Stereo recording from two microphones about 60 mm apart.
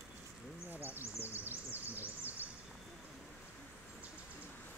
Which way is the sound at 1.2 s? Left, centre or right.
Right.